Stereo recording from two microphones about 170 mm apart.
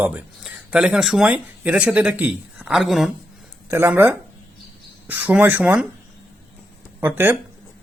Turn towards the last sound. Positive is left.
turn(degrees=-10)  # may be behind; listen again after turning